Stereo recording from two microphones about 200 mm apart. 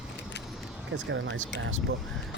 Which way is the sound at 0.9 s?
65° right (ahead or behind).